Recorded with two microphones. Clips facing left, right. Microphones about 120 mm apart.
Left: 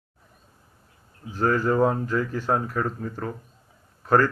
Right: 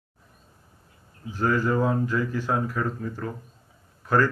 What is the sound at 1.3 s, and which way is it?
Speech, 35° left (ahead or behind).